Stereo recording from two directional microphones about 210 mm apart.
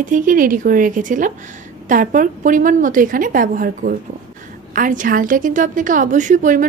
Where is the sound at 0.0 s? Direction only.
40° right (ahead or behind).